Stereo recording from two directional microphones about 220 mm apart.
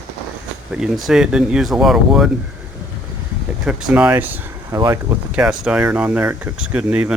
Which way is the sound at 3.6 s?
5° right (ahead or behind).